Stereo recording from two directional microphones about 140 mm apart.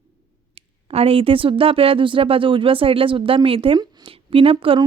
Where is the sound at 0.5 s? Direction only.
45° right (ahead or behind).